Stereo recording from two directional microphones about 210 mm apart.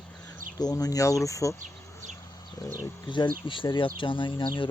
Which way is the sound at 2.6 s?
15° left (ahead or behind).